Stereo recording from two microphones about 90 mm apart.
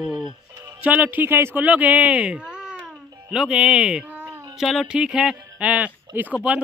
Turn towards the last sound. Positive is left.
turn(degrees=-15)  # may be behind; listen again after turning